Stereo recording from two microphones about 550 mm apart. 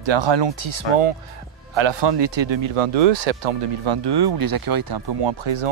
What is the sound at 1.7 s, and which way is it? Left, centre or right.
Speech, right.